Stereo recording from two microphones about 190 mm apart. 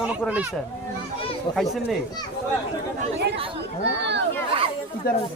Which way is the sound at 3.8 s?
65° right (ahead or behind).